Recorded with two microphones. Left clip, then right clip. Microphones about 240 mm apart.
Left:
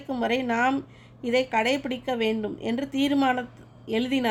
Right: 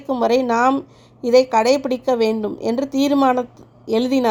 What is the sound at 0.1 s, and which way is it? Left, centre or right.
A woman's voice, right.